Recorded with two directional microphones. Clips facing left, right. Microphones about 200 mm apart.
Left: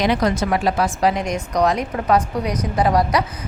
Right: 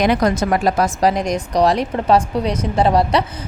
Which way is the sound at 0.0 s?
50° right (ahead or behind).